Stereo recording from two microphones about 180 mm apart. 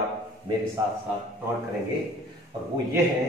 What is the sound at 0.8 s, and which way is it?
Speech, 20° right (ahead or behind).